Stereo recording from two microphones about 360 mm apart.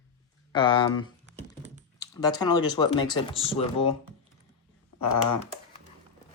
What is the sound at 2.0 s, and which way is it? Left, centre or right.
Speech, centre.